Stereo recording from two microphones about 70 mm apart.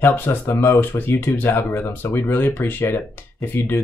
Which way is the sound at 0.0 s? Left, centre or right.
Left.